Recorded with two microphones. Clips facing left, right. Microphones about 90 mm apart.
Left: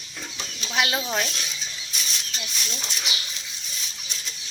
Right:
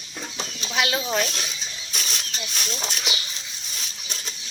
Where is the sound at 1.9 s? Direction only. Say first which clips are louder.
Right 3 dB; 55° right (ahead or behind).